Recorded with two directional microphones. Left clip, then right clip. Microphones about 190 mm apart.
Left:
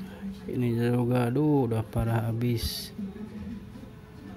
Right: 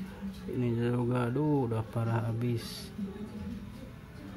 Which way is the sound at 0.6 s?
15° left (ahead or behind).